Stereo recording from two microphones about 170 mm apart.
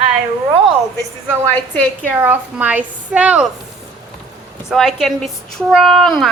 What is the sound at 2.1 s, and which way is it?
A woman's voice, 10° right (ahead or behind).